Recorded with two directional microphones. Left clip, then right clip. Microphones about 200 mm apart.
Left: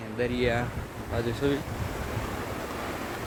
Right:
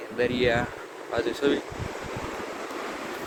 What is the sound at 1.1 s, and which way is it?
Speech, 25° right (ahead or behind).